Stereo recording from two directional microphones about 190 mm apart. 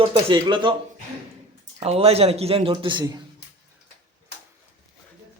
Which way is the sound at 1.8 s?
35° right (ahead or behind).